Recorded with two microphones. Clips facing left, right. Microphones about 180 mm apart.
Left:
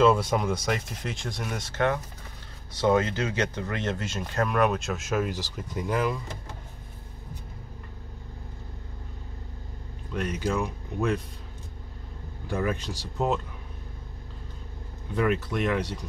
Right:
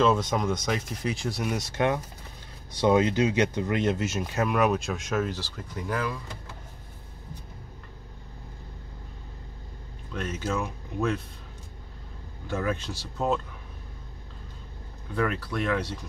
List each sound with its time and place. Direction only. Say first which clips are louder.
0.0 s speech: left 2 dB; 5° left (ahead or behind)
10.1 s speech: left 2 dB; 15° left (ahead or behind)
12.4 s speech: left 1 dB; 15° left (ahead or behind)
15.1 s speech: left 2 dB; 20° left (ahead or behind)